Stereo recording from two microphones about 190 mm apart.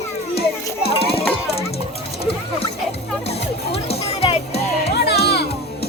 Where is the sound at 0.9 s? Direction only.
30° left (ahead or behind).